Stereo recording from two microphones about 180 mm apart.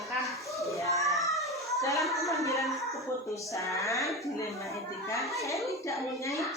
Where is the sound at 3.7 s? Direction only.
15° left (ahead or behind).